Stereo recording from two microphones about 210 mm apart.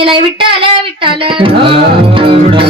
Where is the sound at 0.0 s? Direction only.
25° right (ahead or behind).